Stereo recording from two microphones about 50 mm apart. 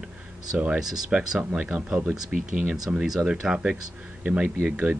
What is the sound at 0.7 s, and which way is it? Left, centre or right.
Speech, centre.